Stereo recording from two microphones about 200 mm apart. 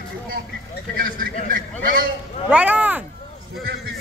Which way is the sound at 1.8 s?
45° right (ahead or behind).